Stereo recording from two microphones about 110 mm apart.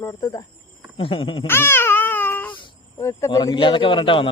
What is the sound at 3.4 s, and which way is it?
Speech, 45° left (ahead or behind).